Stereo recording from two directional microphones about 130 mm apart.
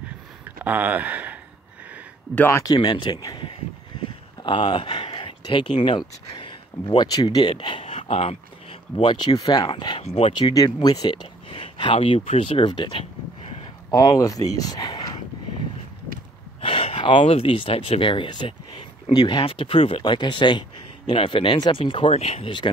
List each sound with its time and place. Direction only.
0.7 s speech: 10° right (ahead or behind)
2.3 s speech: 15° left (ahead or behind)
2.6 s speech: 30° left (ahead or behind); by 8.4 s 50° left (ahead or behind)
8.9 s speech: 35° left (ahead or behind)
10.4 s speech: 30° left (ahead or behind)
16.6 s speech: 45° left (ahead or behind)